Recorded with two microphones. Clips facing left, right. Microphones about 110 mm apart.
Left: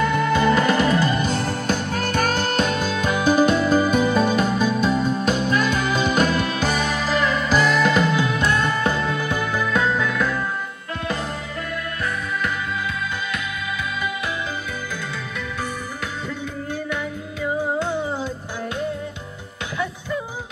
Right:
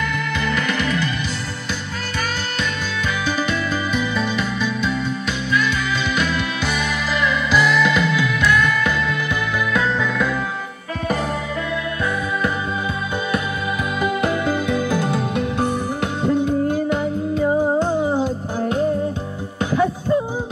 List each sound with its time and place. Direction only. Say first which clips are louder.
0.0 s music: left 5 dB; 35° left (ahead or behind)
14.0 s music: right 7 dB; 55° right (ahead or behind)
16.3 s music: right 11 dB; 45° right (ahead or behind)
19.7 s music: right 9 dB; 35° right (ahead or behind)